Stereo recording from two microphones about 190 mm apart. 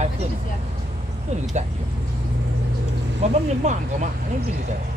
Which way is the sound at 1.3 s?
35° right (ahead or behind).